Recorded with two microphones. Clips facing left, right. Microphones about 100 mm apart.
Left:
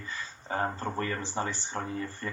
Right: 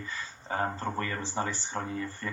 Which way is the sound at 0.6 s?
30° right (ahead or behind).